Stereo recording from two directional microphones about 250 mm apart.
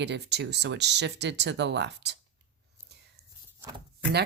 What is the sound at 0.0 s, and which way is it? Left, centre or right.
Speech, right.